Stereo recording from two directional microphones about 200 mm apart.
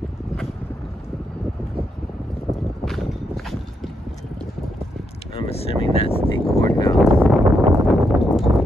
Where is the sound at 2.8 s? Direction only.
Centre (ahead or behind).